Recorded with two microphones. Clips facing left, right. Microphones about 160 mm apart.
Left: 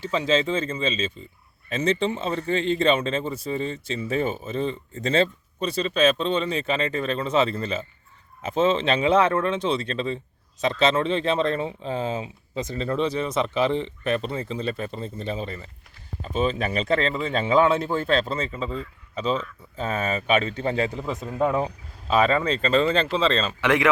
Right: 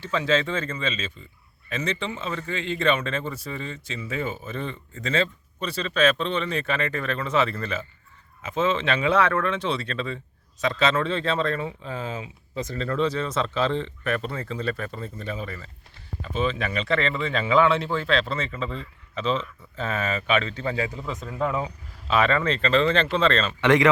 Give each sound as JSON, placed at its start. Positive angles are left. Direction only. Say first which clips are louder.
{"t": 0.1, "sound": "a man's voice", "louder": "left 1 dB", "side_deg": 20}
{"t": 16.2, "sound": "speech", "louder": "left 2 dB", "side_deg": 40}
{"t": 18.5, "sound": "speech", "louder": "left 1 dB", "side_deg": 5}
{"t": 19.8, "sound": "speech", "louder": "left 1 dB", "side_deg": 40}
{"t": 20.6, "sound": "a man's voice", "louder": "left 3 dB", "side_deg": 25}
{"t": 21.6, "sound": "speech", "louder": "left 4 dB", "side_deg": 40}
{"t": 22.9, "sound": "speech", "louder": "even", "side_deg": 5}